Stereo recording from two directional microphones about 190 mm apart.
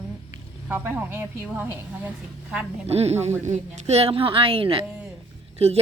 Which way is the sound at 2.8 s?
35° right (ahead or behind).